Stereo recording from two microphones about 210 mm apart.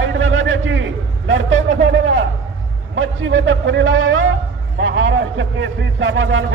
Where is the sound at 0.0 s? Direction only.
65° right (ahead or behind).